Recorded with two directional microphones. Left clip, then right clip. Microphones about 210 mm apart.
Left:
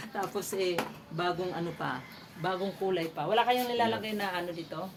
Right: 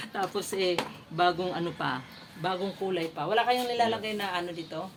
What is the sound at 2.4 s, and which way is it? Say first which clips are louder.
A man's voice: right 1 dB; 25° right (ahead or behind).